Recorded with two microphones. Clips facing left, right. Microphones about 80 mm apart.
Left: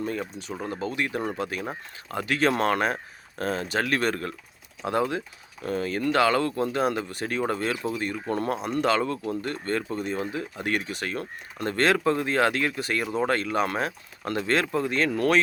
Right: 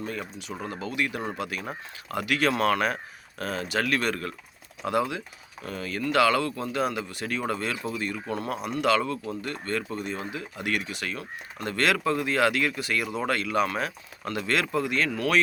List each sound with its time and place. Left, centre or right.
0.6 s speech: left
8.3 s speech: left
8.8 s speech: left